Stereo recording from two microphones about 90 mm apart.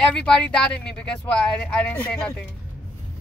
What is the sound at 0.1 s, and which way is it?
Speech, 10° left (ahead or behind).